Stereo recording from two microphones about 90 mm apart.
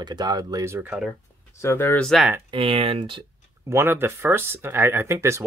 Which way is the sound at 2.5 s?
90° right.